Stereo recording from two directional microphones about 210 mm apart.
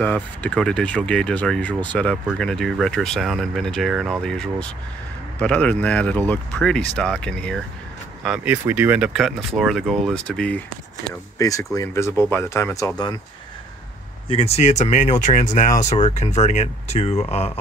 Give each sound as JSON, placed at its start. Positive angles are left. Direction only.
{"t": 0.0, "sound": "speech", "side_deg": 5}
{"t": 11.3, "sound": "speech", "side_deg": 15}
{"t": 14.3, "sound": "speech", "side_deg": 30}